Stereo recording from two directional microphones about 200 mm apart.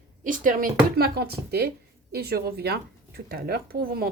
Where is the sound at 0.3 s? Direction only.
40° right (ahead or behind).